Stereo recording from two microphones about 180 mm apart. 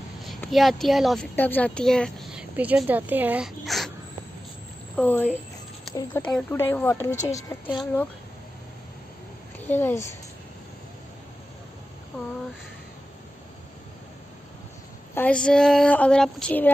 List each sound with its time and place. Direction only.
0.2 s speech: centre (ahead or behind)
4.9 s speech: 10° left (ahead or behind)
9.6 s a woman's voice: 10° left (ahead or behind)
15.1 s speech: 5° left (ahead or behind)